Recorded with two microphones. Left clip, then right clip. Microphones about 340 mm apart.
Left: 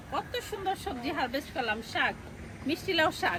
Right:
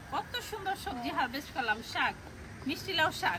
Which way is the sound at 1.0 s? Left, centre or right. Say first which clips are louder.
Left 1 dB; centre.